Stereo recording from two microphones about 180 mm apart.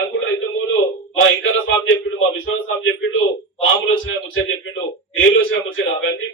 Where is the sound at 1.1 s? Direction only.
90° left.